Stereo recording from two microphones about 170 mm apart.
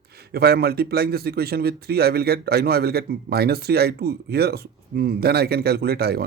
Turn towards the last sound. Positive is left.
turn(degrees=-65)  # may be behind; listen again after turning